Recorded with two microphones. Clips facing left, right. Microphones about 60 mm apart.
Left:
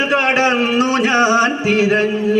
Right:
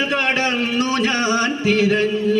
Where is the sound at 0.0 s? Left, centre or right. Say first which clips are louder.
Left 5 dB; centre.